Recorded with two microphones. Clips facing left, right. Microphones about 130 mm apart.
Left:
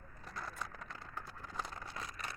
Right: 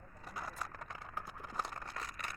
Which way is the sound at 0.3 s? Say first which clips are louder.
Right 1 dB; 5° right (ahead or behind).